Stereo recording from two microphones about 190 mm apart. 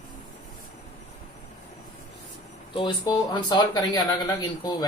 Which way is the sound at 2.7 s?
25° left (ahead or behind).